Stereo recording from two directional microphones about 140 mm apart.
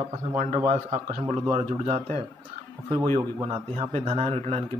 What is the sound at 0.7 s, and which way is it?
A man's voice, 50° right (ahead or behind).